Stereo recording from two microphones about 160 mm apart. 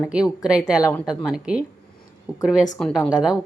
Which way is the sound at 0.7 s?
20° left (ahead or behind).